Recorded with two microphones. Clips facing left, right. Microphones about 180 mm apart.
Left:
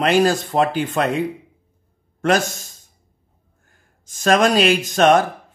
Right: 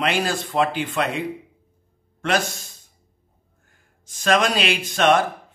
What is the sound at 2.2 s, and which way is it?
Speech, 45° left (ahead or behind).